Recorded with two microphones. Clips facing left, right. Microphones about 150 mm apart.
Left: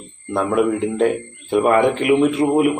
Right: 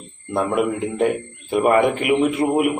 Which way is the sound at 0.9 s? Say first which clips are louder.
Left 2 dB; 15° right (ahead or behind).